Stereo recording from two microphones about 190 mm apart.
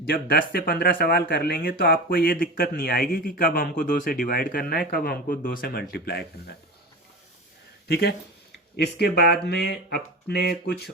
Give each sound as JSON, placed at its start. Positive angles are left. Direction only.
{"t": 0.0, "sound": "speech", "side_deg": 55}
{"t": 7.9, "sound": "speech", "side_deg": 55}